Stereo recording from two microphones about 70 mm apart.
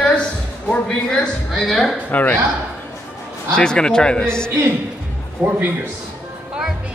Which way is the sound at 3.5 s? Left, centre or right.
Centre.